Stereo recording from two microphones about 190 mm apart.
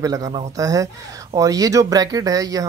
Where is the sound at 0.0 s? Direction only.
20° right (ahead or behind).